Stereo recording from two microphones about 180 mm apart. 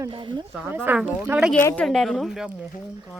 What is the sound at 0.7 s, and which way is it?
A woman's voice, 10° right (ahead or behind).